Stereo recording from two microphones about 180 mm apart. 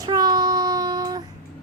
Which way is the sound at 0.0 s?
20° right (ahead or behind).